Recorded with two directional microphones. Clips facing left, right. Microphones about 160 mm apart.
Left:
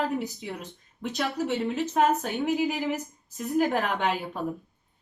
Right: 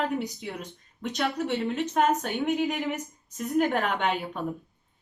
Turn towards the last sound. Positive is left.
turn(degrees=0)  # may be behind; listen again after turning